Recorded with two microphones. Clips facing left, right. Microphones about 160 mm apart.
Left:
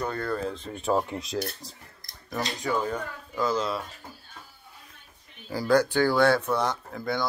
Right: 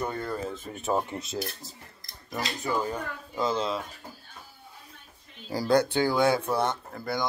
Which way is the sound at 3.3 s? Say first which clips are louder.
Left 1 dB; 25° right (ahead or behind).